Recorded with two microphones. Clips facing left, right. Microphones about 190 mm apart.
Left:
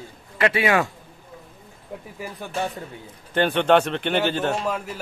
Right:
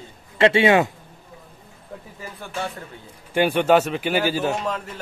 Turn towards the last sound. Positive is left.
turn(degrees=5)  # may be behind; listen again after turning